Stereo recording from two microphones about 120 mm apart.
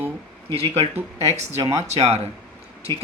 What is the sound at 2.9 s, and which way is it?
Speech, 35° right (ahead or behind).